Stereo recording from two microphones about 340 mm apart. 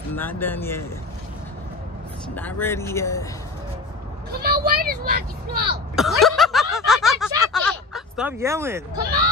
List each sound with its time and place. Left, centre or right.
0.1 s speech: centre
2.2 s speech: centre
4.3 s speech: right
5.9 s snicker: centre
8.9 s speech: right